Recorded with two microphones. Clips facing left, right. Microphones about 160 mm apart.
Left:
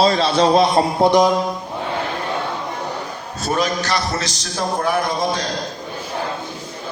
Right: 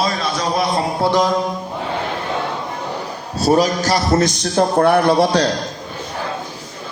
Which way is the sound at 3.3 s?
35° right (ahead or behind).